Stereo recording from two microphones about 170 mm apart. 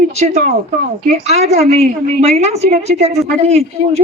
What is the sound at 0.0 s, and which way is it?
A woman's voice, 40° right (ahead or behind).